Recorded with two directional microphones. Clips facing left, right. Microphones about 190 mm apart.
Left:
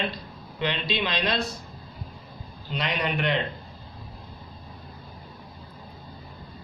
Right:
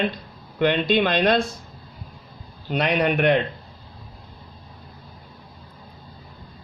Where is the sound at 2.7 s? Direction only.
55° right (ahead or behind).